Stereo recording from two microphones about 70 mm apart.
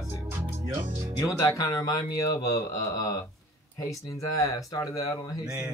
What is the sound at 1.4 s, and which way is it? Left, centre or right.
Speech, left.